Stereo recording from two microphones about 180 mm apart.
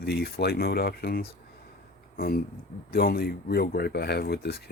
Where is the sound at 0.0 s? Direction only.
60° left (ahead or behind).